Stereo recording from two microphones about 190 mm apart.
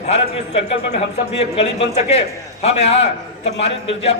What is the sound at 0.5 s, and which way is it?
A man's voice, 30° left (ahead or behind).